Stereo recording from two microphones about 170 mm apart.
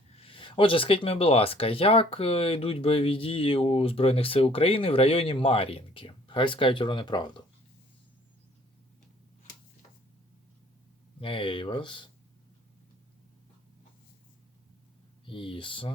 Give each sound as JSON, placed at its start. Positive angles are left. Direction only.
{"t": 0.2, "sound": "speech", "side_deg": 30}
{"t": 11.2, "sound": "speech", "side_deg": 30}
{"t": 15.3, "sound": "speech", "side_deg": 30}